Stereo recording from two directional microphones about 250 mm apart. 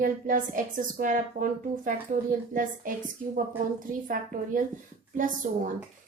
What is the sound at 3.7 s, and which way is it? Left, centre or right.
A woman's voice, right.